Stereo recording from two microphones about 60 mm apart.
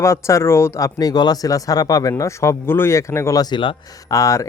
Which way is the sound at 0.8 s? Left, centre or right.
Left.